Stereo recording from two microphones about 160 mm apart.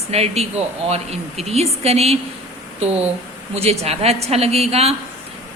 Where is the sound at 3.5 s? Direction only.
40° right (ahead or behind).